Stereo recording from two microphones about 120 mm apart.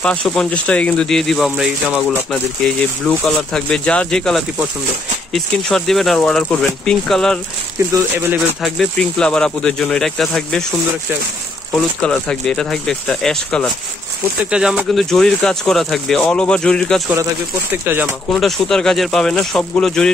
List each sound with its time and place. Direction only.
0.0 s speech: 10° left (ahead or behind)
3.1 s speech: 5° left (ahead or behind)
8.4 s speech: centre (ahead or behind)
11.7 s speech: 10° left (ahead or behind)
14.4 s speech: 5° right (ahead or behind)
15.0 s speech: 5° left (ahead or behind)
18.3 s speech: 5° left (ahead or behind)